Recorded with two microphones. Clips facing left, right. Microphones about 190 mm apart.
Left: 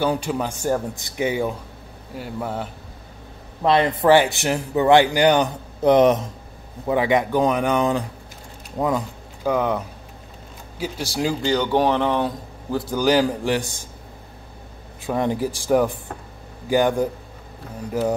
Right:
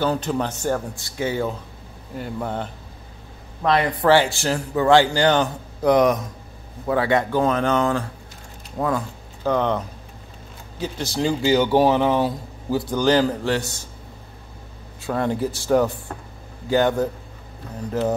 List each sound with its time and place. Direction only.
0.0 s speech: 10° left (ahead or behind)
2.1 s speech: 5° left (ahead or behind)
3.6 s a man's voice: 25° left (ahead or behind); by 11.3 s 10° left (ahead or behind)
11.4 s speech: 5° right (ahead or behind); by 13.8 s 15° left (ahead or behind)
15.0 s a man's voice: 15° left (ahead or behind)